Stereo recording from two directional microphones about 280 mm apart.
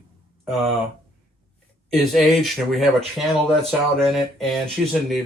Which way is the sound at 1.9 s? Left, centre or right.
Centre.